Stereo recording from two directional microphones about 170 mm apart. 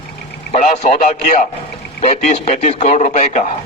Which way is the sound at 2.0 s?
45° left (ahead or behind).